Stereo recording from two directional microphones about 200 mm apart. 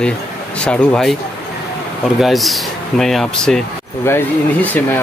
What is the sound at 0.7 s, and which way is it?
Speech, 5° left (ahead or behind).